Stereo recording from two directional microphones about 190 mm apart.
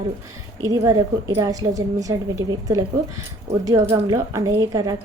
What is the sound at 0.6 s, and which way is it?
A woman's voice, 20° right (ahead or behind).